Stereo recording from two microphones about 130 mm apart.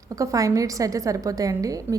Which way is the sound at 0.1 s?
25° right (ahead or behind).